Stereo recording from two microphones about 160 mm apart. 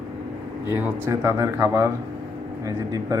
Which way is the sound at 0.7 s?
15° right (ahead or behind).